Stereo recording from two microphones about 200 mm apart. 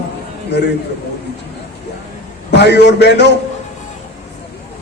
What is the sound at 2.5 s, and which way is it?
Speech, 60° left (ahead or behind).